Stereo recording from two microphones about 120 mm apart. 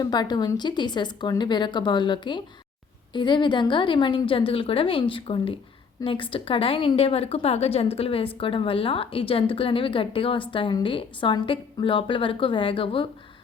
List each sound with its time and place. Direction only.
0.0 s a woman's voice: 35° left (ahead or behind)